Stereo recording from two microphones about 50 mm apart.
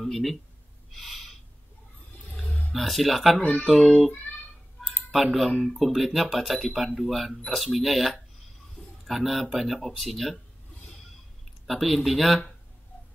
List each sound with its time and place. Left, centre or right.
0.0 s speech: centre
0.9 s owl: centre
2.3 s a sound: left
2.7 s speech: centre
3.3 s speech: left
3.6 s speech: centre
5.1 s speech: centre
11.6 s speech: centre